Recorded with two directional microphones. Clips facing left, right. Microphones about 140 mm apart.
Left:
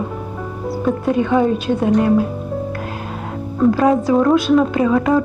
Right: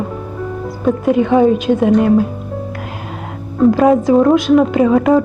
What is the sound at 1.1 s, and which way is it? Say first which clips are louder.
Speech: right 4 dB; 20° right (ahead or behind).